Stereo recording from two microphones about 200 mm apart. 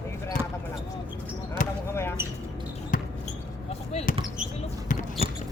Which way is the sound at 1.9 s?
10° left (ahead or behind).